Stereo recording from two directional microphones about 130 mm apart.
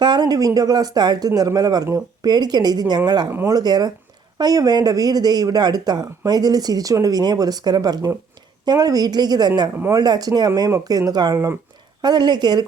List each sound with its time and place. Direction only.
0.0 s speech: 35° right (ahead or behind)